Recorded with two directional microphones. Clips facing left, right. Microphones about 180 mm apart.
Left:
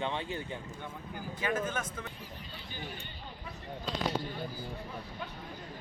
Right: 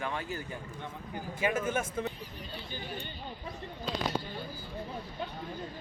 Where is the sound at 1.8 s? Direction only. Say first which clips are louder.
Right 7 dB; 25° right (ahead or behind).